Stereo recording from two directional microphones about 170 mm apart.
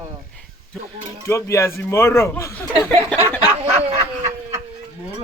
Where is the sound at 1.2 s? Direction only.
15° left (ahead or behind).